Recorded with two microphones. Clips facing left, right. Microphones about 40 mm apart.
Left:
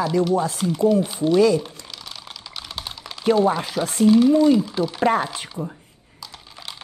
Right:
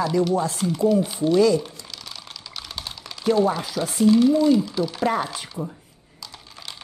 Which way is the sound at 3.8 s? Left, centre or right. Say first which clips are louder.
Left 2 dB; centre.